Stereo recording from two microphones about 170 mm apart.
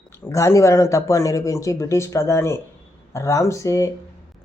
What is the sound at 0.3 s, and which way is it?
Speech, 15° left (ahead or behind).